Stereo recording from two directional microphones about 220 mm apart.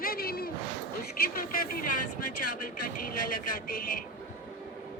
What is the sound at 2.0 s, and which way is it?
Speech, 90° left.